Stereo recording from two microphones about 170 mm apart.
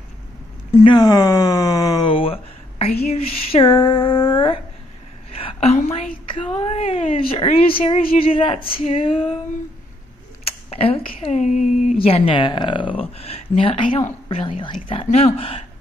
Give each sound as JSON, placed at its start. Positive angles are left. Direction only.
{"t": 0.8, "sound": "speech", "side_deg": 25}
{"t": 5.4, "sound": "a sound", "side_deg": 35}
{"t": 5.8, "sound": "a woman's voice", "side_deg": 35}
{"t": 10.4, "sound": "speech", "side_deg": 35}